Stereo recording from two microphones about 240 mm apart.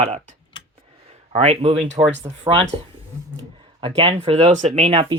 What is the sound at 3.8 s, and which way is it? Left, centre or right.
Speech, right.